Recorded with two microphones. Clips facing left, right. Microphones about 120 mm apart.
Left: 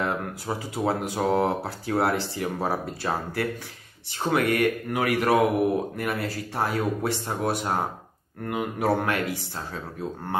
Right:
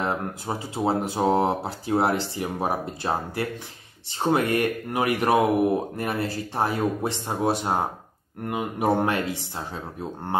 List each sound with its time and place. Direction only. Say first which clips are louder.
0.0 s speech: right 1 dB; 25° right (ahead or behind)